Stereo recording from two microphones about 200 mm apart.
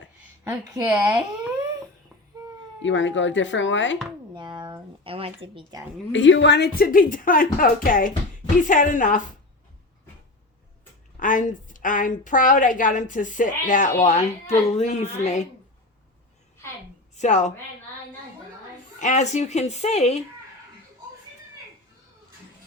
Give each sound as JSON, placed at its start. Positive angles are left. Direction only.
{"t": 0.4, "sound": "a woman's voice", "side_deg": -15}
{"t": 2.8, "sound": "speech", "side_deg": 70}
{"t": 4.4, "sound": "a sound", "side_deg": -20}
{"t": 6.1, "sound": "a woman's voice", "side_deg": 70}
{"t": 11.2, "sound": "a woman's voice", "side_deg": 40}
{"t": 17.2, "sound": "a woman's voice", "side_deg": 35}
{"t": 18.9, "sound": "a woman's voice", "side_deg": 35}